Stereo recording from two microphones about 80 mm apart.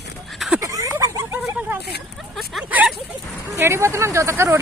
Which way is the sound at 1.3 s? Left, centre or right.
Right.